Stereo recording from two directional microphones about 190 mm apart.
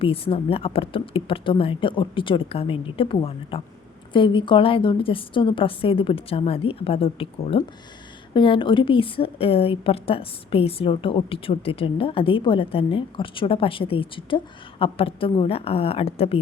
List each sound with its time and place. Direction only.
0.0 s a woman's voice: 30° left (ahead or behind)